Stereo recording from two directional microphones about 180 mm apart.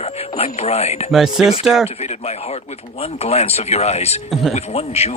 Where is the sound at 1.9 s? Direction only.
35° left (ahead or behind).